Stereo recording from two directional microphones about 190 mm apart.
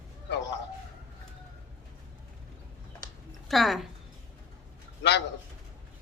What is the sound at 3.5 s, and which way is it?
Speech, centre (ahead or behind).